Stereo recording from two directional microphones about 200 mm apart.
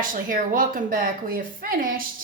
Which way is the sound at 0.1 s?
40° right (ahead or behind).